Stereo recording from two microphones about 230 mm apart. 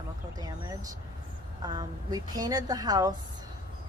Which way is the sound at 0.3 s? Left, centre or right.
Centre.